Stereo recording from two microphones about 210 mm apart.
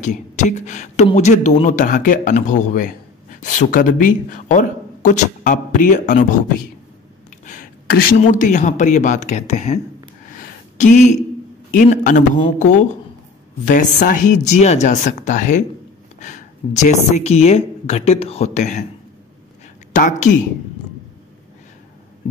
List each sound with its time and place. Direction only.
0.0 s speech: 35° left (ahead or behind)
7.4 s a sound: 40° left (ahead or behind)
8.2 s speech: 35° left (ahead or behind)
10.8 s speech: 35° left (ahead or behind)
13.9 s speech: 40° left (ahead or behind)
19.9 s speech: 35° left (ahead or behind)